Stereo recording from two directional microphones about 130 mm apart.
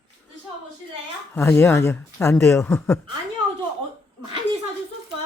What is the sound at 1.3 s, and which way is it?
Speech, 15° left (ahead or behind).